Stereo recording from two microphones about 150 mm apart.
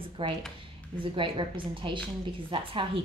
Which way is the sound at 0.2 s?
35° right (ahead or behind).